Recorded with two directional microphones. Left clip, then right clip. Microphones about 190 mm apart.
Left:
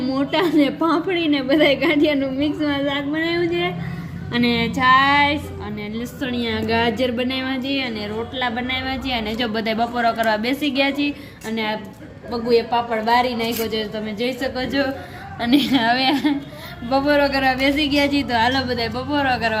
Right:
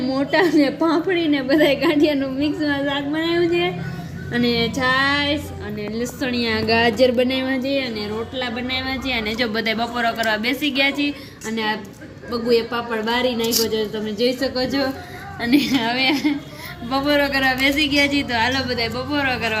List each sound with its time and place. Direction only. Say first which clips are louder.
0.0 s a woman's voice: right 2 dB; 20° left (ahead or behind)
4.3 s a woman's voice: even; 20° left (ahead or behind)
6.1 s a woman's voice: right 1 dB; centre (ahead or behind); by 11.1 s 20° left (ahead or behind)
11.4 s a woman's voice: right 1 dB; 5° left (ahead or behind)
15.4 s a woman's voice: left 1 dB; 20° left (ahead or behind)